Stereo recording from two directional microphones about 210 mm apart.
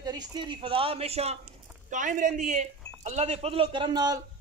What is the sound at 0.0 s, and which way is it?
Speech, 20° right (ahead or behind).